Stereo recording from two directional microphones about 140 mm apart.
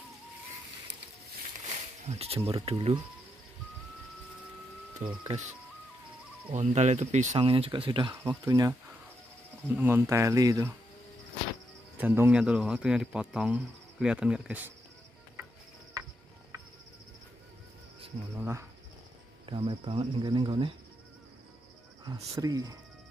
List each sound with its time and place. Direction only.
2.0 s speech: 45° right (ahead or behind)
5.0 s speech: 60° right (ahead or behind)
6.5 s speech: 55° right (ahead or behind)
7.3 s speech: 40° right (ahead or behind)
9.7 s speech: 15° right (ahead or behind)
12.0 s speech: 15° right (ahead or behind)
18.4 s speech: 20° right (ahead or behind)
19.4 s speech: 40° right (ahead or behind)
22.0 s speech: 25° right (ahead or behind)